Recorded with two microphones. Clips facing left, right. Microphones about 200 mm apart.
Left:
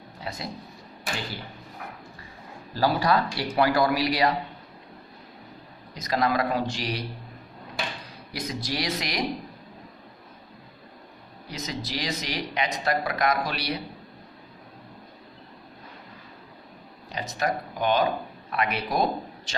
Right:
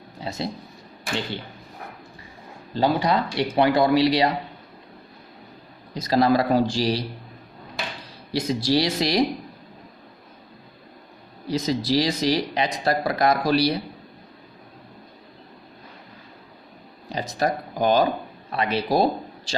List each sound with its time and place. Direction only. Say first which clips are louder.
0.3 s speech: right 6 dB; 25° right (ahead or behind)
2.7 s speech: right 2 dB; 20° right (ahead or behind)
5.9 s speech: right 6 dB; 30° right (ahead or behind)
8.3 s speech: right 10 dB; 30° right (ahead or behind)
11.4 s speech: right 11 dB; 30° right (ahead or behind)
17.1 s speech: right 4 dB; 35° right (ahead or behind)